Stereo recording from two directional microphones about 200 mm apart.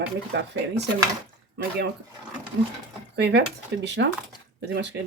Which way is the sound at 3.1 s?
55° right (ahead or behind).